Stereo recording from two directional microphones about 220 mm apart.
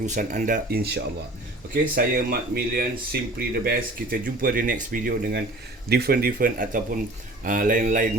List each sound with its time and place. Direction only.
0.0 s speech: 35° right (ahead or behind)